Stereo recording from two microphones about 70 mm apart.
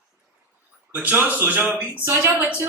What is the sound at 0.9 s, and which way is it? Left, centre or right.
Speech, right.